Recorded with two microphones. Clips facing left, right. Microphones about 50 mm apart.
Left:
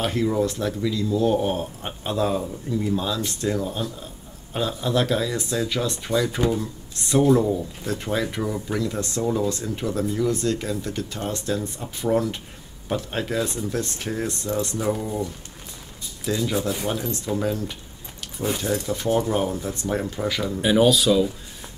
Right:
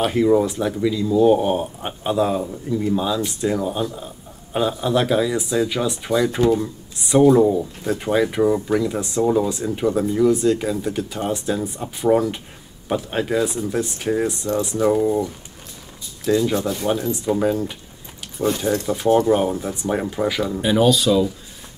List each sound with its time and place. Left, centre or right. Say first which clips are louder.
0.0 s speech: right 6 dB; centre
16.3 s speech: right 5 dB; centre
20.6 s speech: right 1 dB; centre